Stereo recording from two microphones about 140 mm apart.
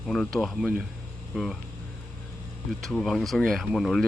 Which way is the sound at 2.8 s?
5° left (ahead or behind).